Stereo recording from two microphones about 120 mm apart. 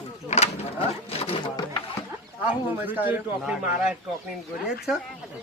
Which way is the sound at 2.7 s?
15° right (ahead or behind).